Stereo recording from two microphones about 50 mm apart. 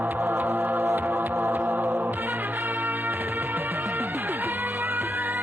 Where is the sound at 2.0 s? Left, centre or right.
Right.